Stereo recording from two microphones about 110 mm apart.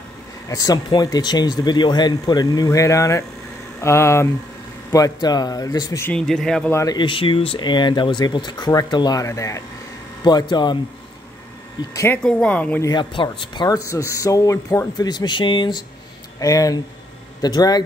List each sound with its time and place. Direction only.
0.5 s speech: 35° left (ahead or behind)
4.9 s speech: 35° left (ahead or behind)
6.1 s speech: 5° left (ahead or behind)
6.7 s speech: 30° left (ahead or behind)
7.0 s speech: 50° left (ahead or behind); by 9.6 s 30° left (ahead or behind)
10.2 s speech: 40° left (ahead or behind)
11.9 s speech: 25° left (ahead or behind)
12.2 s speech: 5° left (ahead or behind)
12.9 s speech: 45° left (ahead or behind)
13.7 s speech: 30° left (ahead or behind)
15.0 s speech: 40° left (ahead or behind)
16.3 s speech: 30° left (ahead or behind)